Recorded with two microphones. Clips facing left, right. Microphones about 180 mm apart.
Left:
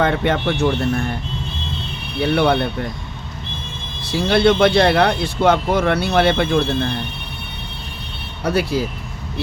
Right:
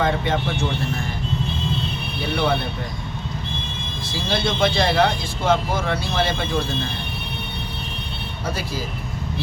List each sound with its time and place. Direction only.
0.0 s speech: 60° left (ahead or behind)
2.3 s speech: 60° left (ahead or behind)
4.0 s speech: 65° left (ahead or behind)
8.4 s speech: 65° left (ahead or behind)